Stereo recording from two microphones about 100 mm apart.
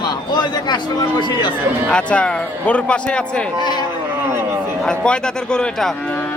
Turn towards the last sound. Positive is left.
turn(degrees=10)  # may be behind; listen again after turning